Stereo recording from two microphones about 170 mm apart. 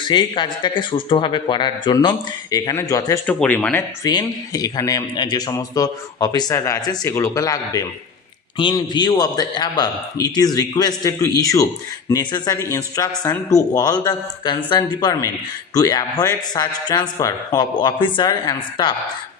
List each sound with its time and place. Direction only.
0.0 s a man's voice: 25° left (ahead or behind)
3.2 s speech: 10° left (ahead or behind)
4.0 s a man's voice: 25° left (ahead or behind)